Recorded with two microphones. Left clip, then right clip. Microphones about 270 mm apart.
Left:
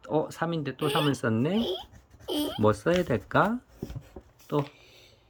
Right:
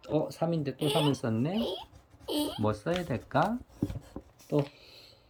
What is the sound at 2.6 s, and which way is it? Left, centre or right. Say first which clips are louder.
Speech: left 7 dB; centre.